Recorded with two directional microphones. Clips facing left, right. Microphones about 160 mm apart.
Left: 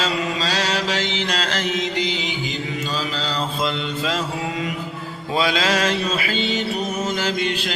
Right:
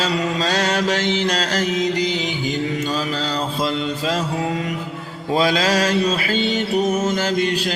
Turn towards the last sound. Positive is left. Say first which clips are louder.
# right 3 dB
turn(degrees=-40)  # may be behind; listen again after turning